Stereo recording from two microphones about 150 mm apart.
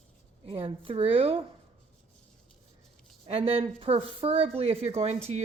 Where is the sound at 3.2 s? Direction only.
40° right (ahead or behind).